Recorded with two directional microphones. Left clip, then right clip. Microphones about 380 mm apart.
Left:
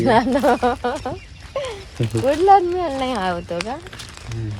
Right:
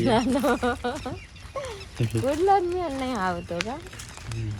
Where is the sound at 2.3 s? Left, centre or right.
Left.